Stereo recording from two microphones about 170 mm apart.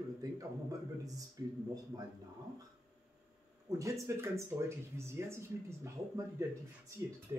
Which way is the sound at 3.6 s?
20° right (ahead or behind).